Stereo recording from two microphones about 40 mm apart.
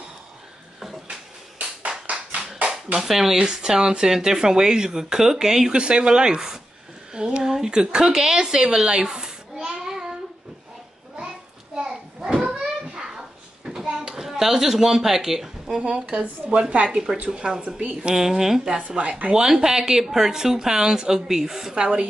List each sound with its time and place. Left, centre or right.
1.6 s a sound: right
3.0 s speech: centre
8.8 s child singing: centre
11.7 s children playing: centre
13.8 s a sound: centre
14.2 s a man's voice: centre
15.8 s speech: right
16.2 s speech: centre
17.9 s speech: centre
18.8 s speech: right
19.4 s speech: centre